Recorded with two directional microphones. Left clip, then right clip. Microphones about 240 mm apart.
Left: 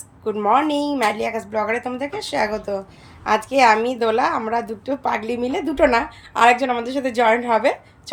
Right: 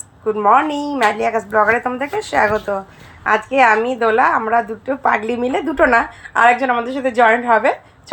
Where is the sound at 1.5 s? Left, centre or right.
Right.